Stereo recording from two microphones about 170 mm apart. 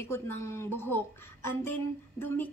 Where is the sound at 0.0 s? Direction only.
15° left (ahead or behind).